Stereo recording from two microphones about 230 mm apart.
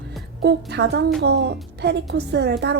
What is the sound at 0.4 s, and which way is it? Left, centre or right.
A woman's voice, right.